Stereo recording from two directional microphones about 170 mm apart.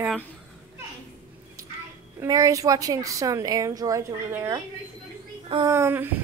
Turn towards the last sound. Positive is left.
turn(degrees=-15)  # may be behind; listen again after turning